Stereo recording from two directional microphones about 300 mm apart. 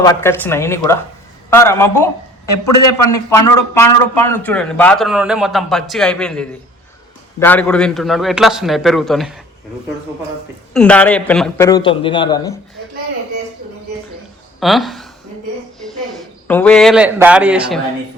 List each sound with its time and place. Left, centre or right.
0.0 s a man's voice: centre
2.6 s a man's voice: left
3.2 s a man's voice: centre
10.8 s a man's voice: centre
14.6 s speech: centre